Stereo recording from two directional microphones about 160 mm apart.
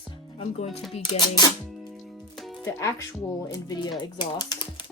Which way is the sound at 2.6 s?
20° left (ahead or behind).